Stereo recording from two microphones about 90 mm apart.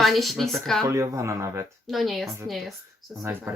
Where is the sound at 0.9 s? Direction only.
35° right (ahead or behind).